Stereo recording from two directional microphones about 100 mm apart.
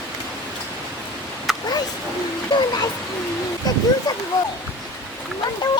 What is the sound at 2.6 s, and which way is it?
Speech, 45° left (ahead or behind).